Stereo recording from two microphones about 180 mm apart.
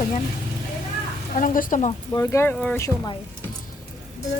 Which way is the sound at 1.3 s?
45° left (ahead or behind).